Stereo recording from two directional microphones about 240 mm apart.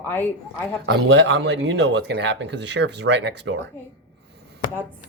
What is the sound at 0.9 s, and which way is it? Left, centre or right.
Speech, right.